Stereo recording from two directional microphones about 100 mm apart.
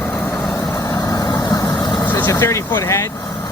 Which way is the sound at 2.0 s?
20° left (ahead or behind).